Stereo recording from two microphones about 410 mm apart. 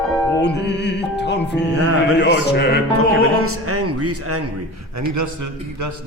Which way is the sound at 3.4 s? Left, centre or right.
Right.